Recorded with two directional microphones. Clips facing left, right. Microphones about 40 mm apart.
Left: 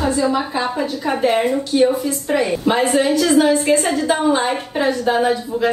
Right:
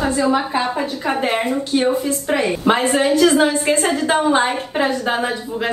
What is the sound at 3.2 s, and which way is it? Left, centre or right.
Speech, centre.